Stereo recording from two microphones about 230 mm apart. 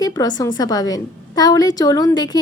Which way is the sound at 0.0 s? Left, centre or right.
Centre.